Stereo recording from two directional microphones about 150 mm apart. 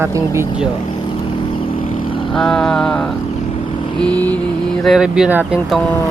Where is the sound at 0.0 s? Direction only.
20° right (ahead or behind).